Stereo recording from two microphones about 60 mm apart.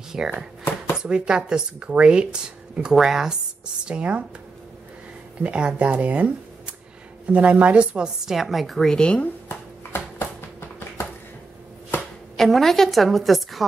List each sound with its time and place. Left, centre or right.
0.1 s speech: centre
3.8 s speech: centre
5.4 s speech: centre
8.3 s a woman's voice: centre
9.2 s a sound: left
12.4 s a woman's voice: centre